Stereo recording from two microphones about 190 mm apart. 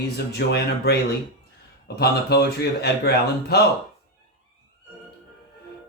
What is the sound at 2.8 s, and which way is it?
Speech, 60° left (ahead or behind).